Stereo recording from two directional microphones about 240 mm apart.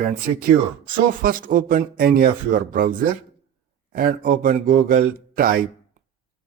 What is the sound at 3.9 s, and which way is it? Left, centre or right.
A man's voice, right.